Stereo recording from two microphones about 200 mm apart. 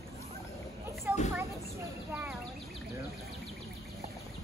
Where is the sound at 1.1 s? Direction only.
10° right (ahead or behind).